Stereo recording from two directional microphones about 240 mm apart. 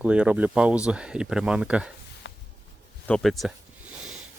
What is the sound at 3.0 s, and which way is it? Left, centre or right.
Speech, centre.